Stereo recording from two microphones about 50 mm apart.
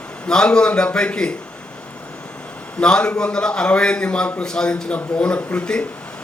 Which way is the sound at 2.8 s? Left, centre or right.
Centre.